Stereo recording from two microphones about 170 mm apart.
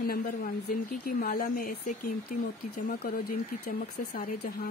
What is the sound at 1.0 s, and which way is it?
Speech, 55° left (ahead or behind).